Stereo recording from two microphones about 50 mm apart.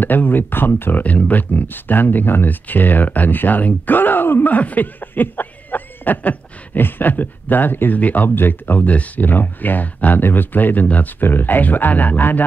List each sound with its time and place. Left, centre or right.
0.0 s speech: left
1.0 s speech: left